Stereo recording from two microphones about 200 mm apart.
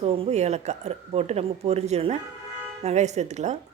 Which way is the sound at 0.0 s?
30° right (ahead or behind).